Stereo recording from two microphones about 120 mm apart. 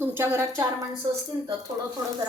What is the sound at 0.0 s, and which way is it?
Speech, 20° right (ahead or behind).